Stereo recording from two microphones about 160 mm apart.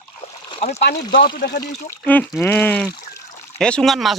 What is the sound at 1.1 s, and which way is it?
Speech, 60° left (ahead or behind).